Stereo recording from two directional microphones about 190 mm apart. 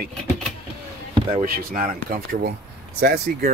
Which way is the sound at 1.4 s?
45° right (ahead or behind).